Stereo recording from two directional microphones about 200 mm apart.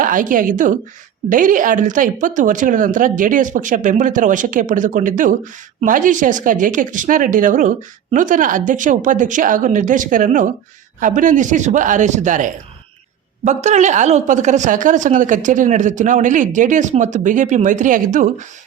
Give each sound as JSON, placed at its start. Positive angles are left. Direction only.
{"t": 0.0, "sound": "a woman's voice", "side_deg": -40}